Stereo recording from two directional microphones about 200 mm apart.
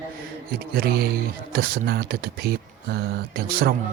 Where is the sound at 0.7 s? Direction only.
50° right (ahead or behind).